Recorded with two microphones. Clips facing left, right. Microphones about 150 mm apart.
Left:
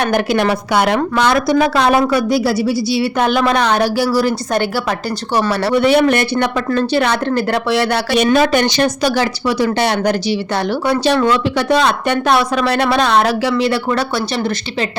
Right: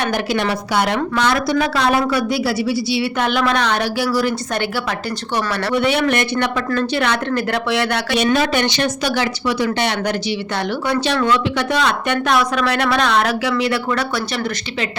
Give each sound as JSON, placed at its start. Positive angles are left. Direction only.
{"t": 0.0, "sound": "a woman's voice", "side_deg": 55}